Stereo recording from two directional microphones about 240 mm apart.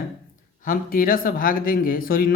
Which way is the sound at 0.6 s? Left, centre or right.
Left.